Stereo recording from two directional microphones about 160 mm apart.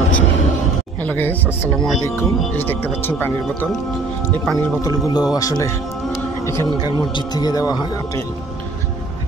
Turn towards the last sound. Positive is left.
turn(degrees=25)  # may be behind; listen again after turning